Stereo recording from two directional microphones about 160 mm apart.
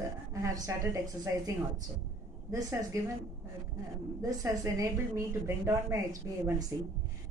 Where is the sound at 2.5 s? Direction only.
20° right (ahead or behind).